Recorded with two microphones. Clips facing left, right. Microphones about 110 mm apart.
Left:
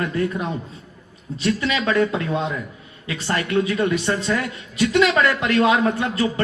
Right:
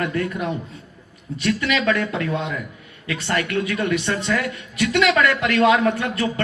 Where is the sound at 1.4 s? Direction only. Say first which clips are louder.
Even; 25° left (ahead or behind).